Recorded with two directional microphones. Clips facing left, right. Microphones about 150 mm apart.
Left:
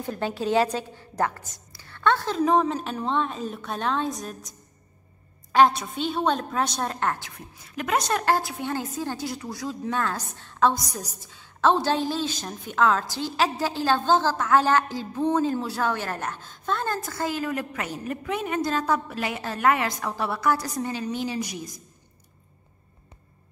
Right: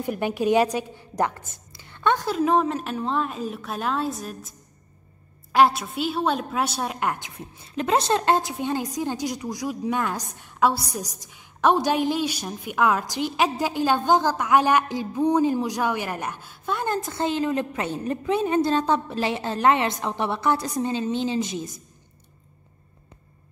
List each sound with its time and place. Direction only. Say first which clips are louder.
0.0 s a woman's voice: right 4 dB; 15° right (ahead or behind)